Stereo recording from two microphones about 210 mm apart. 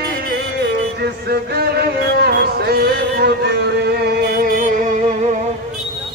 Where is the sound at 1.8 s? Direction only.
50° right (ahead or behind).